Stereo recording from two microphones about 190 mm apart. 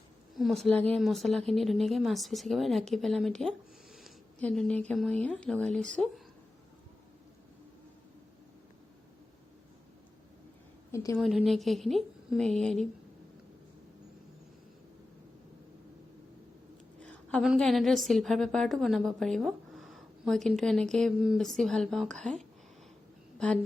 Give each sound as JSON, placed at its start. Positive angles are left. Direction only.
{"t": 0.3, "sound": "a woman's voice", "side_deg": 0}
{"t": 10.9, "sound": "a woman's voice", "side_deg": 15}
{"t": 11.2, "sound": "a woman's voice", "side_deg": 0}
{"t": 17.0, "sound": "a sound", "side_deg": 5}
{"t": 17.5, "sound": "a woman's voice", "side_deg": 0}